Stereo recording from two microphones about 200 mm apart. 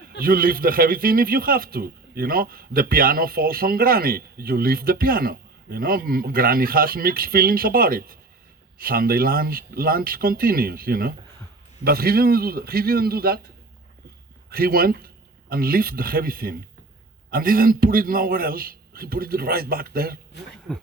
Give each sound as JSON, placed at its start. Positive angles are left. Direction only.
{"t": 0.2, "sound": "speech", "side_deg": -45}
{"t": 14.5, "sound": "speech", "side_deg": -50}